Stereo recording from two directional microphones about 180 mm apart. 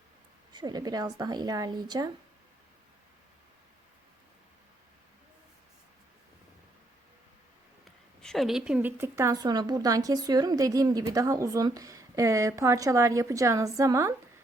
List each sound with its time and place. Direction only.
0.5 s a woman's voice: 20° right (ahead or behind)
7.9 s a woman's voice: centre (ahead or behind); by 14.1 s 15° right (ahead or behind)